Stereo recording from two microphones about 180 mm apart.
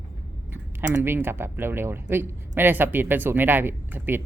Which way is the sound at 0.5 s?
10° right (ahead or behind).